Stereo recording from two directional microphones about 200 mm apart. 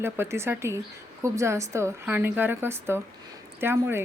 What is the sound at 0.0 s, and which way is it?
Speech, 10° right (ahead or behind).